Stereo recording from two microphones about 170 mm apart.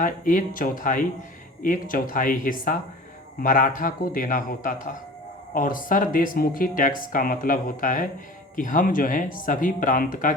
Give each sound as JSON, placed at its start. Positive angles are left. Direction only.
{"t": 0.0, "sound": "speech", "side_deg": 50}